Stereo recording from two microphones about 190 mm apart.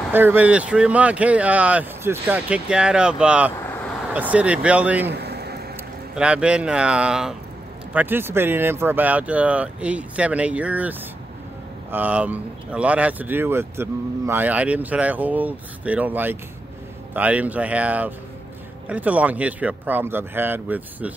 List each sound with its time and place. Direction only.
0.1 s speech: 10° right (ahead or behind)
5.1 s vehicle: 60° right (ahead or behind)
6.1 s speech: 5° right (ahead or behind)